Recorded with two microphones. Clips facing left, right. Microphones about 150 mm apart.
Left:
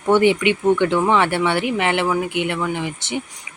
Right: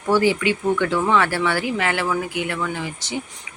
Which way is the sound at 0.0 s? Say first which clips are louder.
Left 3 dB; 20° left (ahead or behind).